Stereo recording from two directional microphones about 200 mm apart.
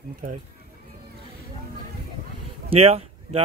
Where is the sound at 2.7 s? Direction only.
30° right (ahead or behind).